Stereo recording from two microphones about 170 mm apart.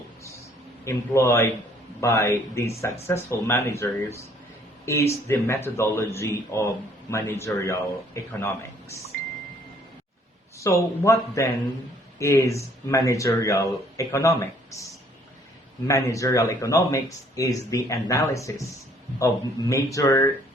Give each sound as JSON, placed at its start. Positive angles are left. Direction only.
{"t": 0.9, "sound": "speech", "side_deg": 15}
{"t": 10.6, "sound": "speech", "side_deg": 20}
{"t": 15.9, "sound": "speech", "side_deg": 20}